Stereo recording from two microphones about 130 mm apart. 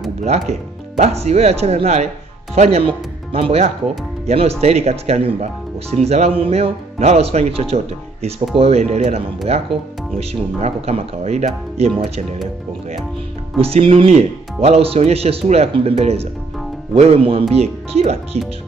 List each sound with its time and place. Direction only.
0.2 s speech: 55° right (ahead or behind)
13.6 s speech: 50° right (ahead or behind)